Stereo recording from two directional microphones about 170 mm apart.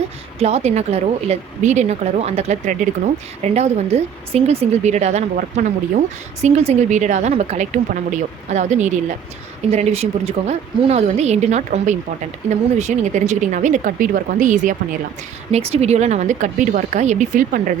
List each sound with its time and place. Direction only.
0.3 s a woman's voice: 40° right (ahead or behind)
15.5 s a woman's voice: 40° right (ahead or behind)